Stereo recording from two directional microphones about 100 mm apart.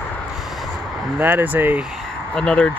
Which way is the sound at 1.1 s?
15° right (ahead or behind).